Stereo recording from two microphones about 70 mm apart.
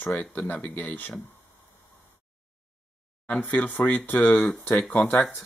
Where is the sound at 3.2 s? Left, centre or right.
Centre.